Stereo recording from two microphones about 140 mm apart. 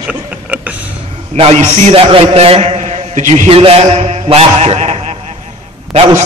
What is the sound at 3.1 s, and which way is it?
Speech, 60° right (ahead or behind).